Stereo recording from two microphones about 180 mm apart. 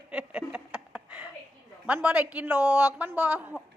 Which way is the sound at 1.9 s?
5° right (ahead or behind).